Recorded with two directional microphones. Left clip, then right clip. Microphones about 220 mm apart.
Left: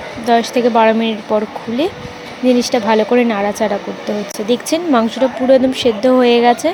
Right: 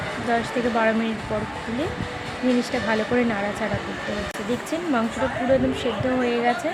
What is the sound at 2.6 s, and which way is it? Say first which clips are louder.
Speech: left 10 dB; 30° left (ahead or behind).